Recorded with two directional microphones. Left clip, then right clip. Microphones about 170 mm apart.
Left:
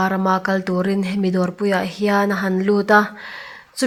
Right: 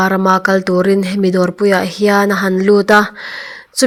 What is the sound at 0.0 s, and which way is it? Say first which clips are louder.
Speech: right 7 dB; 30° right (ahead or behind).